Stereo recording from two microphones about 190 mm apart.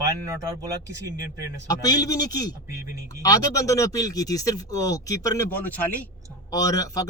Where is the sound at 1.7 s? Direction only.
20° left (ahead or behind).